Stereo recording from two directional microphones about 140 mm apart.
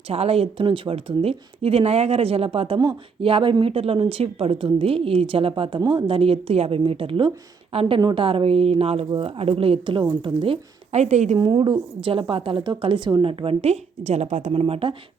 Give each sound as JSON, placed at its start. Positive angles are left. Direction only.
{"t": 0.1, "sound": "a woman's voice", "side_deg": -45}
{"t": 11.3, "sound": "a woman's voice", "side_deg": -35}